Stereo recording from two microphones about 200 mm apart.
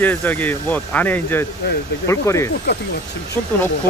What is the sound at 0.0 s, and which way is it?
Speech, 10° left (ahead or behind).